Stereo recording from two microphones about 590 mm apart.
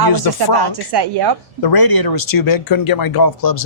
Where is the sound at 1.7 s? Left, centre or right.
Left.